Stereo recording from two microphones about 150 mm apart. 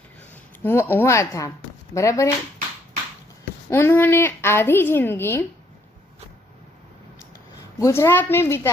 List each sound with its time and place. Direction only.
0.6 s a woman's voice: 15° left (ahead or behind)
3.7 s a woman's voice: 15° left (ahead or behind)
7.8 s a woman's voice: 20° left (ahead or behind)